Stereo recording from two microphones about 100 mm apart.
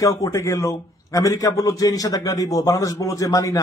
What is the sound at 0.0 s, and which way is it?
A man's voice, 35° left (ahead or behind).